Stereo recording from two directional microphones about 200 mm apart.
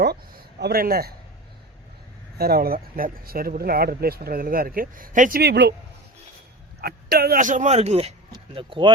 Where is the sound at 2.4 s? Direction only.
50° right (ahead or behind).